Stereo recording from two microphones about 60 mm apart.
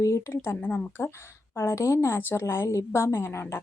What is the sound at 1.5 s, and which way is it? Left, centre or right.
Speech, left.